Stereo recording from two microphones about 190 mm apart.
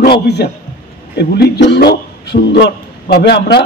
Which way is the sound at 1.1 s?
60° left (ahead or behind).